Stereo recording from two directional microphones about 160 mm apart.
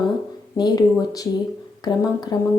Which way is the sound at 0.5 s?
25° left (ahead or behind).